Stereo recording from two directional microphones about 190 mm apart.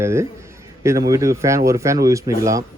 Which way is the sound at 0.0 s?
15° right (ahead or behind).